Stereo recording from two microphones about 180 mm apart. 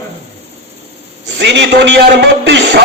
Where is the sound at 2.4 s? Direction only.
70° right (ahead or behind).